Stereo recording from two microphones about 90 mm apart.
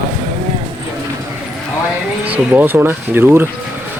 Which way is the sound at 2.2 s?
20° right (ahead or behind).